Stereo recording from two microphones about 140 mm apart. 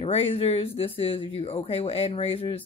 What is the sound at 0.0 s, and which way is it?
Speech, 45° left (ahead or behind).